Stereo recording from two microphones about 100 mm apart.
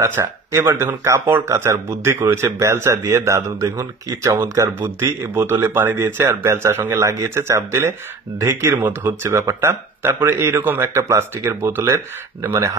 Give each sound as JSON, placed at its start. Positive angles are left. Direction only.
{"t": 0.0, "sound": "speech", "side_deg": -25}